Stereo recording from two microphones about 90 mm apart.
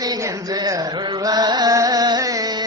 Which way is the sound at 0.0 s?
40° right (ahead or behind).